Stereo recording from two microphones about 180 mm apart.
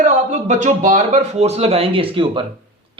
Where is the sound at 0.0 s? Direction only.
40° right (ahead or behind).